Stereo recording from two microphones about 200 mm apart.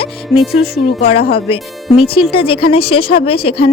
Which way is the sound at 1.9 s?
25° left (ahead or behind).